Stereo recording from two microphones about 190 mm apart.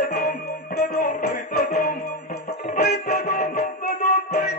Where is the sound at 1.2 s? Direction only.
40° left (ahead or behind).